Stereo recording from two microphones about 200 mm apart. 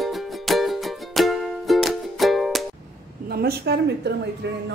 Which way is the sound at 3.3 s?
50° right (ahead or behind).